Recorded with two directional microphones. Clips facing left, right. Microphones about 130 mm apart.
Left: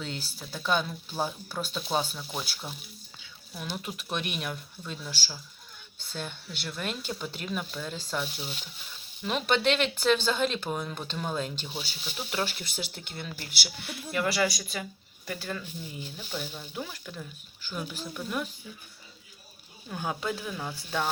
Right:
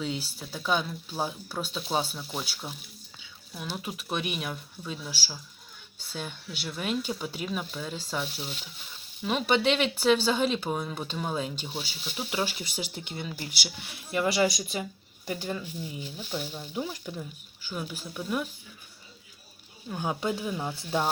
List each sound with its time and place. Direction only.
0.0 s speech: 5° right (ahead or behind)
3.8 s speech: 5° right (ahead or behind)
17.7 s speech: 10° right (ahead or behind)
20.0 s speech: 20° right (ahead or behind)